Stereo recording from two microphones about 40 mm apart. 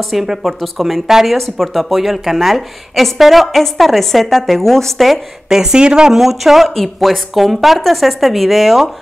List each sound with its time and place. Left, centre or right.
0.1 s a woman's voice: centre
5.5 s speech: centre
6.1 s a woman's voice: centre